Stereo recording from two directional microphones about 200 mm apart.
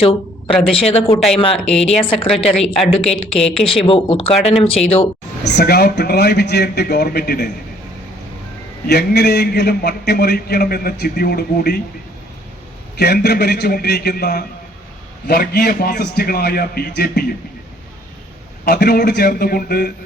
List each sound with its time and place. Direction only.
0.0 s speech: 30° left (ahead or behind)
1.5 s speech: 5° left (ahead or behind)
1.9 s speech: 25° left (ahead or behind)
2.6 s speech: centre (ahead or behind)
3.8 s speech: 25° left (ahead or behind)
5.4 s a man's voice: 55° left (ahead or behind)
8.9 s a man's voice: 55° left (ahead or behind)
13.0 s a man's voice: 55° left (ahead or behind)
18.6 s a man's voice: 55° left (ahead or behind)